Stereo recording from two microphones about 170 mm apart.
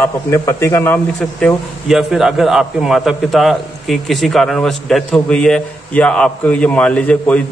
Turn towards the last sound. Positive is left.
turn(degrees=10)  # may be behind; listen again after turning